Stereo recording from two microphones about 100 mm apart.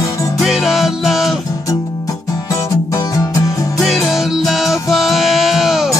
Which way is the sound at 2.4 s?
35° left (ahead or behind).